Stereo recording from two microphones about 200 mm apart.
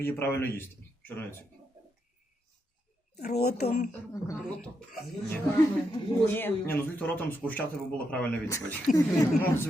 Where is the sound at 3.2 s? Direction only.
35° left (ahead or behind).